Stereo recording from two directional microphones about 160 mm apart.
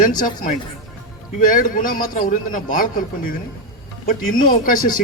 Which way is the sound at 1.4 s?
55° left (ahead or behind).